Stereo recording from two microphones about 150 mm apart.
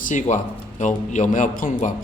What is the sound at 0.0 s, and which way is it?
A man's voice, 60° left (ahead or behind).